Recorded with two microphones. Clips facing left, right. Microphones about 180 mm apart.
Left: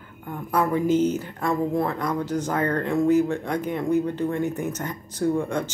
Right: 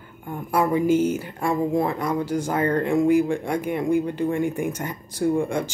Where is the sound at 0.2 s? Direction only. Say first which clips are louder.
Right 1 dB; 10° right (ahead or behind).